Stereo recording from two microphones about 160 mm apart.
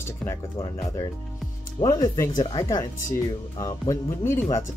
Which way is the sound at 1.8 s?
25° left (ahead or behind).